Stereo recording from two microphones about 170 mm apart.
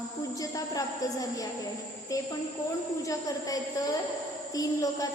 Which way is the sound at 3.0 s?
20° left (ahead or behind).